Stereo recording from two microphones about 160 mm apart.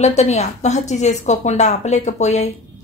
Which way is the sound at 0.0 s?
45° left (ahead or behind).